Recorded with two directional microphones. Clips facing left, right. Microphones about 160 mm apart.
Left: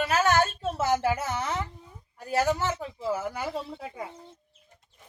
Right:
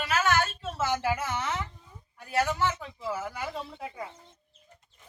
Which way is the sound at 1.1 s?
40° left (ahead or behind).